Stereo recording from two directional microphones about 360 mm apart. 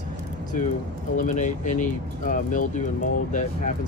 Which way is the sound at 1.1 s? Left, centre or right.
Left.